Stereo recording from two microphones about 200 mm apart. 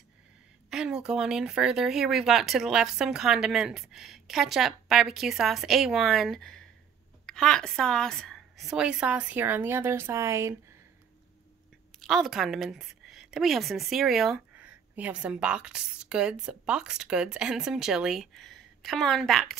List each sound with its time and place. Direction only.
0.7 s speech: 5° right (ahead or behind)
12.0 s a woman's voice: centre (ahead or behind)